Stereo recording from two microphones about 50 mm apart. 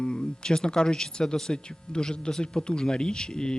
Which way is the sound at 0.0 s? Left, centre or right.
Centre.